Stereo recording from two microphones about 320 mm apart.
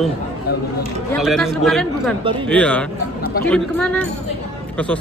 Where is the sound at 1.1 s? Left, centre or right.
Centre.